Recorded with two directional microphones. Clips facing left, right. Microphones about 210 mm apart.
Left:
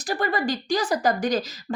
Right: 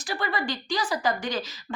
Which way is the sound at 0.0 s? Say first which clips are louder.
Left 5 dB; 40° left (ahead or behind).